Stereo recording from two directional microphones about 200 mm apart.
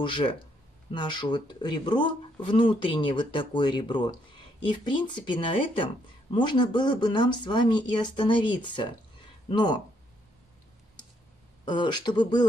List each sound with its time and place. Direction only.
0.0 s speech: 25° left (ahead or behind)
11.6 s speech: 25° left (ahead or behind)